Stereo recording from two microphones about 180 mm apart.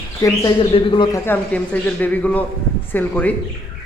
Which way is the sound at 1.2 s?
10° left (ahead or behind).